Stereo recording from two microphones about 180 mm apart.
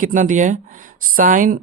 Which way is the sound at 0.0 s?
45° right (ahead or behind).